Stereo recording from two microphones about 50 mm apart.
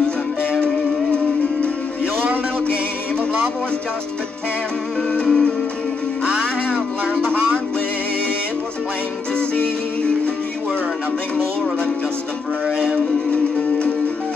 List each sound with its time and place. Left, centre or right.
5.1 s music: centre
7.2 s music: right
12.7 s music: centre